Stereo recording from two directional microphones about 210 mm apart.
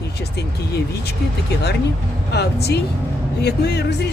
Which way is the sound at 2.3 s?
50° left (ahead or behind).